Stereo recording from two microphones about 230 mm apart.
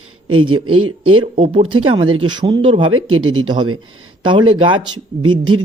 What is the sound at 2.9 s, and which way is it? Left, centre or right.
Speech, right.